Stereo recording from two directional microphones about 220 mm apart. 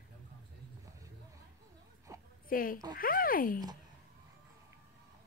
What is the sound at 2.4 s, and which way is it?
A woman's voice, 40° left (ahead or behind).